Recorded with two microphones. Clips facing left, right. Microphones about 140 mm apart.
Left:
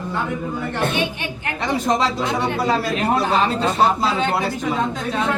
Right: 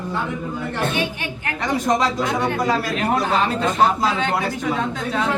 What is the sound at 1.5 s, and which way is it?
A man's voice, 30° left (ahead or behind).